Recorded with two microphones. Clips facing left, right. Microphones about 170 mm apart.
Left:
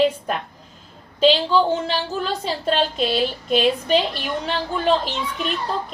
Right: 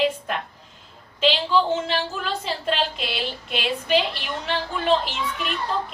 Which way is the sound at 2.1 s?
40° left (ahead or behind).